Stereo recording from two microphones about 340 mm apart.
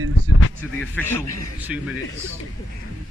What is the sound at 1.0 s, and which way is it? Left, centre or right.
Speech, centre.